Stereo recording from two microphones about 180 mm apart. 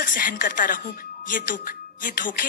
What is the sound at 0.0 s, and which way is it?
Speech, 50° left (ahead or behind).